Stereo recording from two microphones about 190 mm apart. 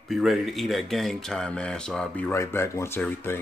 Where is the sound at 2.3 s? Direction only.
15° left (ahead or behind).